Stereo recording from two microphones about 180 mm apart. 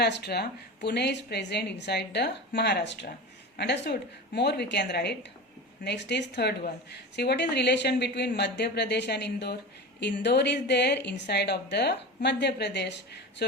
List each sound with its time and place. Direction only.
0.0 s speech: 65° left (ahead or behind)